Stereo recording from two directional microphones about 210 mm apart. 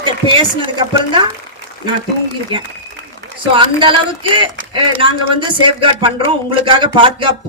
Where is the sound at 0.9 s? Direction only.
20° right (ahead or behind).